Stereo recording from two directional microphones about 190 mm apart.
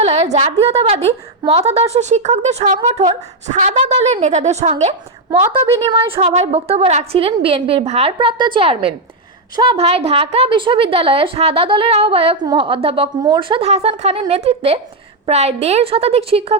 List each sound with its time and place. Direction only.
0.0 s a woman's voice: 35° right (ahead or behind)
5.3 s a woman's voice: 25° right (ahead or behind)